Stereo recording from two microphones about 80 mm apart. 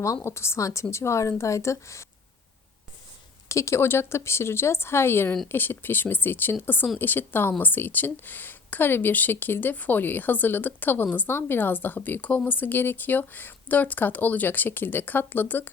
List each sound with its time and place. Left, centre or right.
0.2 s a woman's voice: left
3.5 s a woman's voice: left